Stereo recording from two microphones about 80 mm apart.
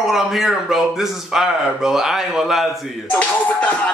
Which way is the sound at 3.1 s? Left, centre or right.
Centre.